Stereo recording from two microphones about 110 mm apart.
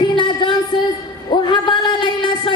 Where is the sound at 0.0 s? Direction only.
45° left (ahead or behind).